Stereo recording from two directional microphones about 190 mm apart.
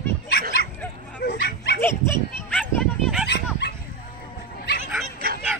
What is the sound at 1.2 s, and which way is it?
Bow-wow, 60° left (ahead or behind).